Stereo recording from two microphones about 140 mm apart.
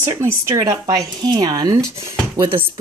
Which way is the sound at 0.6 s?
30° right (ahead or behind).